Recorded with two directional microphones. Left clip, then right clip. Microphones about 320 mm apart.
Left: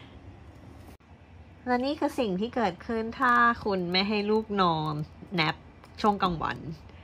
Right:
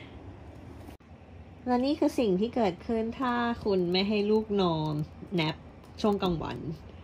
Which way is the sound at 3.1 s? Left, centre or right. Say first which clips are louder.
Left 12 dB; centre.